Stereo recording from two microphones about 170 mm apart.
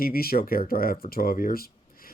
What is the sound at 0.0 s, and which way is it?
Speech, 60° left (ahead or behind).